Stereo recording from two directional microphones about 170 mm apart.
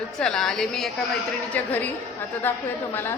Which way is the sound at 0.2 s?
5° left (ahead or behind).